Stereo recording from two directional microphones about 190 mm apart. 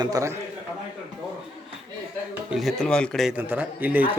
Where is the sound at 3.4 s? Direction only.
10° right (ahead or behind).